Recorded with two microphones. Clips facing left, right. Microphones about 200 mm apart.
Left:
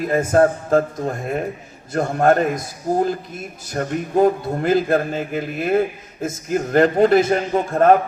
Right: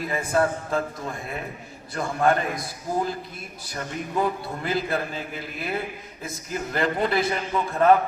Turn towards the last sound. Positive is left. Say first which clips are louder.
# left 4 dB
turn(degrees=45)  # may be behind; listen again after turning